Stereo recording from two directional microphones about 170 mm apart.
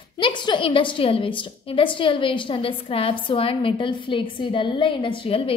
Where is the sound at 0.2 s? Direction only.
25° left (ahead or behind).